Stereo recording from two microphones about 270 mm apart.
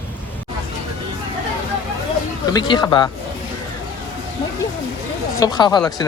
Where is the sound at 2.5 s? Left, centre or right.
Centre.